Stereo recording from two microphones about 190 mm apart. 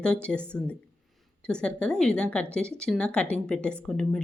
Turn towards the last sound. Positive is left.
turn(degrees=5)  # may be behind; listen again after turning